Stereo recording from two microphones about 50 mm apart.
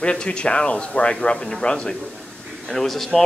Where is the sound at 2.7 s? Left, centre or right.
Centre.